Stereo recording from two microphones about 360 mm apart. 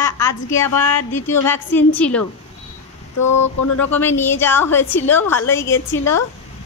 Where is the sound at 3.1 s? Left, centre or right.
Left.